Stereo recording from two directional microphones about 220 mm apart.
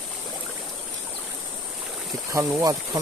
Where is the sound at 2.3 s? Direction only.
15° right (ahead or behind).